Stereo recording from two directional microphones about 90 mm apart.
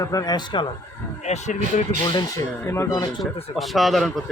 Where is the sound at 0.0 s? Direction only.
40° left (ahead or behind); by 0.7 s 60° left (ahead or behind).